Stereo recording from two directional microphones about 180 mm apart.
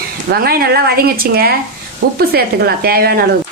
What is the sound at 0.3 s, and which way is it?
A woman's voice, 60° right (ahead or behind).